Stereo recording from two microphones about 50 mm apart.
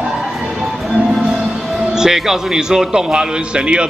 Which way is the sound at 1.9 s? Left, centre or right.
Centre.